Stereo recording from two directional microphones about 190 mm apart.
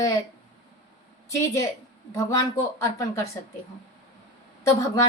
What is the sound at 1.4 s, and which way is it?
Speech, 15° left (ahead or behind).